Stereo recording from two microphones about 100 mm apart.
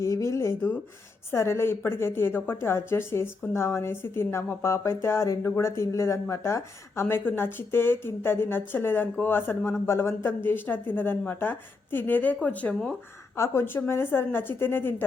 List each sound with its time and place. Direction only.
0.0 s a woman's voice: 30° left (ahead or behind); by 12.9 s 15° left (ahead or behind)
13.3 s a woman's voice: 25° left (ahead or behind)